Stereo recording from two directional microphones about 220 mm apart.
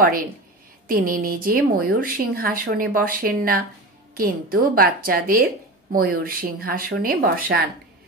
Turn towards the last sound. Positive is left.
turn(degrees=-40)  # may be behind; listen again after turning